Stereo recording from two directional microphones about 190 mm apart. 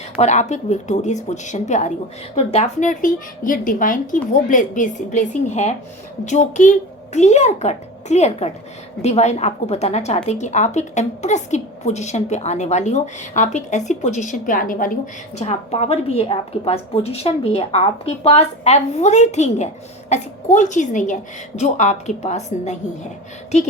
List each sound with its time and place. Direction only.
0.2 s a woman's voice: 40° left (ahead or behind)
15.4 s a woman's voice: 35° left (ahead or behind)